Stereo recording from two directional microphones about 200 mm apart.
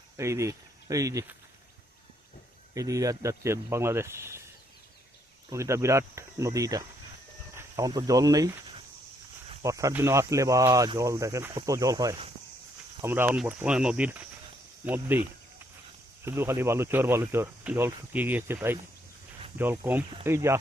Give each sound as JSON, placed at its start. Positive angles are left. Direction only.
{"t": 0.2, "sound": "speech", "side_deg": -15}
{"t": 2.7, "sound": "speech", "side_deg": -15}
{"t": 5.5, "sound": "speech", "side_deg": -15}
{"t": 7.5, "sound": "cricket", "side_deg": -15}
{"t": 9.6, "sound": "speech", "side_deg": -15}
{"t": 16.2, "sound": "speech", "side_deg": -10}